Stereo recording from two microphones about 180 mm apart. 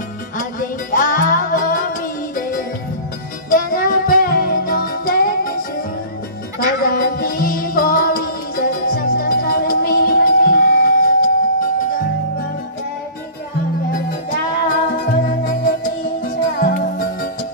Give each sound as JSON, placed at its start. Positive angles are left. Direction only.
{"t": 0.4, "sound": "music", "side_deg": 50}
{"t": 6.8, "sound": "music", "side_deg": 50}
{"t": 14.7, "sound": "music", "side_deg": 50}